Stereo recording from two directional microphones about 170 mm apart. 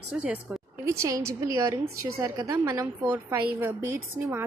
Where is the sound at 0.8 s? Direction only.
15° right (ahead or behind).